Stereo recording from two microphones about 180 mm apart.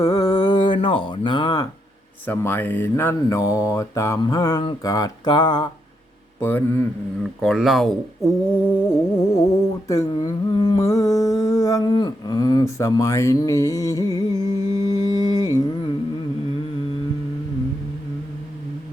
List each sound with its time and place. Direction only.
0.0 s a sound: 20° left (ahead or behind)
2.2 s speech: 10° left (ahead or behind)
6.4 s speech: 10° left (ahead or behind)
7.4 s speech: centre (ahead or behind)
8.6 s speech: 15° left (ahead or behind)
9.9 s a sound: 20° left (ahead or behind)